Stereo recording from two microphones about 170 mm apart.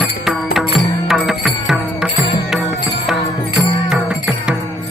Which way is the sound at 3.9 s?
5° right (ahead or behind).